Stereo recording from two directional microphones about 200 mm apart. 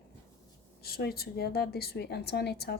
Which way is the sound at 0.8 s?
50° left (ahead or behind).